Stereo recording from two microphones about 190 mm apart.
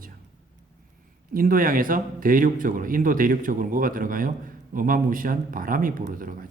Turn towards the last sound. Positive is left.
turn(degrees=-45)  # may be behind; listen again after turning